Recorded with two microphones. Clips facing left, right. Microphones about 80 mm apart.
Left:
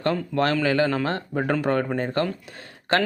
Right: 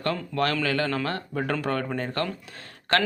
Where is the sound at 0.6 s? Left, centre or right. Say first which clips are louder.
Left 4 dB; left.